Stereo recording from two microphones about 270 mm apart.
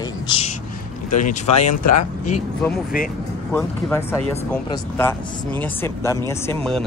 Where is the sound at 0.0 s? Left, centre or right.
Centre.